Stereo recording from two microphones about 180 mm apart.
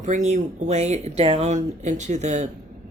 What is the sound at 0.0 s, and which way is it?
Speech, 40° right (ahead or behind).